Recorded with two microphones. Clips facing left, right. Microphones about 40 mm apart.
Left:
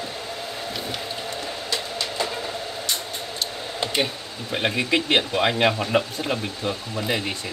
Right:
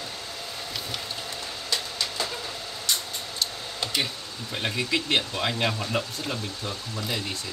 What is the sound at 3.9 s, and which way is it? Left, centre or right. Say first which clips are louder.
Speech: left 4 dB; left.